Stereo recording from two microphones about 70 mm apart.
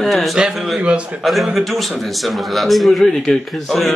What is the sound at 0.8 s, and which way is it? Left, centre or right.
Speech, centre.